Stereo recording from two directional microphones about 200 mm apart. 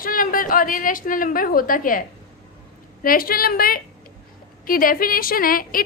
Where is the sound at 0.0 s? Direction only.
45° left (ahead or behind).